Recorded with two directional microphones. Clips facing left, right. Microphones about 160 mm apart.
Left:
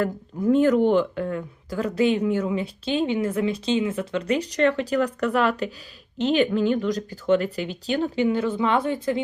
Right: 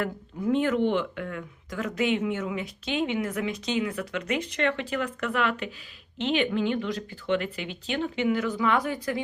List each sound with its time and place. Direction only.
0.0 s speech: 40° left (ahead or behind)